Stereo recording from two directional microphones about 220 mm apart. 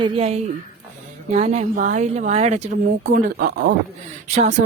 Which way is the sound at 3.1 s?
45° right (ahead or behind).